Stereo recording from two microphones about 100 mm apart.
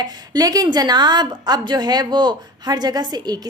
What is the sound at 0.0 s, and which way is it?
A woman's voice, 40° right (ahead or behind).